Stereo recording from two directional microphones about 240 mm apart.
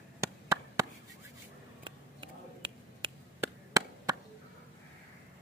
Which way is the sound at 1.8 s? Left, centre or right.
Right.